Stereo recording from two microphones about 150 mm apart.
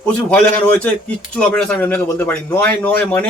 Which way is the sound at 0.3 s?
10° left (ahead or behind).